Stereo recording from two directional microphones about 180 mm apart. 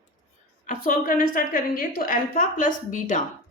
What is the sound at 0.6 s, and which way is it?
A woman's voice, 50° left (ahead or behind).